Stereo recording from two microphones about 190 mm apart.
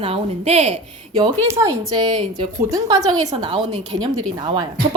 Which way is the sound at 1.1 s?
15° right (ahead or behind).